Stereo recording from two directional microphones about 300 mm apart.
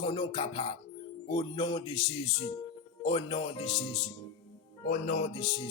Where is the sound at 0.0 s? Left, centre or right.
Centre.